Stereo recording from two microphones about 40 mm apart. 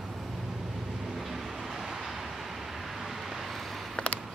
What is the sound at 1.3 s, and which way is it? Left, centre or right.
Vehicle, centre.